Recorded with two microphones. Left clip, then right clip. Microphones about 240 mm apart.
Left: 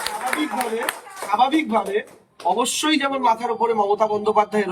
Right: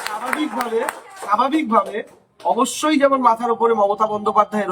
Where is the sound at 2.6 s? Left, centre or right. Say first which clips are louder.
Right 6 dB; centre.